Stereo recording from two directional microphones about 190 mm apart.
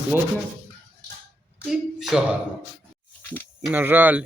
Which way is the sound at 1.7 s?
Centre (ahead or behind).